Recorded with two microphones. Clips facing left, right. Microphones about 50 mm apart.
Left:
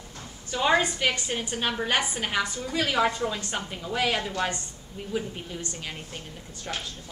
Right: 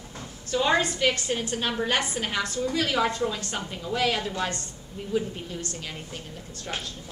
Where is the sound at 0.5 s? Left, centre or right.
Centre.